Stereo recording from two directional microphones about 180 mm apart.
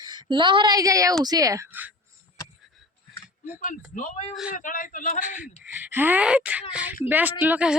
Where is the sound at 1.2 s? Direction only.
20° right (ahead or behind).